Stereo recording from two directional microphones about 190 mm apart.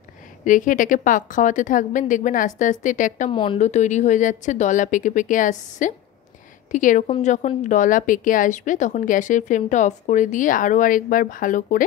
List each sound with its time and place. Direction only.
0.5 s a woman's voice: 45° left (ahead or behind)
3.3 s a woman's voice: 25° left (ahead or behind); by 11.8 s 45° left (ahead or behind)